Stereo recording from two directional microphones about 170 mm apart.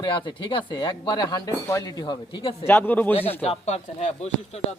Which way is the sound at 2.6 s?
10° left (ahead or behind).